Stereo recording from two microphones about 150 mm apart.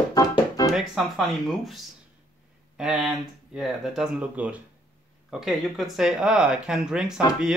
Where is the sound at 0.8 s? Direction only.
Centre (ahead or behind).